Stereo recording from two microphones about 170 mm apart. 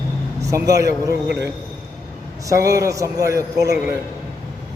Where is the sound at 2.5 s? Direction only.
20° right (ahead or behind).